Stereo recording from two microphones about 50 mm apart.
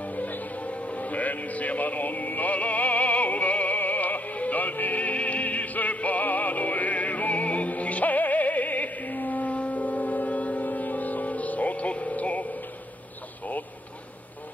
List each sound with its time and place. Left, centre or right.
0.0 s music: left